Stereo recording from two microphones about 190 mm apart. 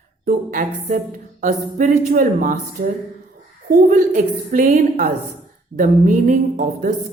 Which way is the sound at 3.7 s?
40° right (ahead or behind).